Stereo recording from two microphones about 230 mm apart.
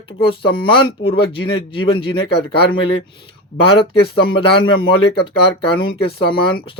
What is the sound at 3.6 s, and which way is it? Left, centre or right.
Speech, left.